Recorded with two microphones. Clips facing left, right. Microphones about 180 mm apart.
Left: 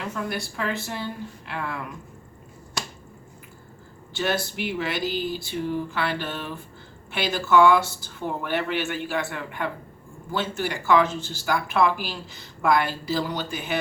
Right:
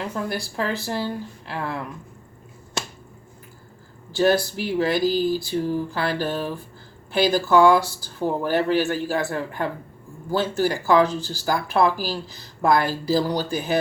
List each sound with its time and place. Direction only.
0.1 s speech: 35° right (ahead or behind)
4.1 s speech: 40° right (ahead or behind)